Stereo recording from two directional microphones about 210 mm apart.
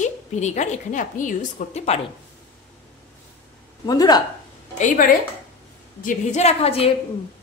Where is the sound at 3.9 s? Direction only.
20° left (ahead or behind).